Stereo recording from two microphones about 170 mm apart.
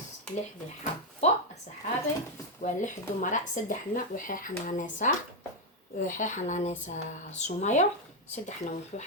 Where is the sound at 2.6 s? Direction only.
45° left (ahead or behind).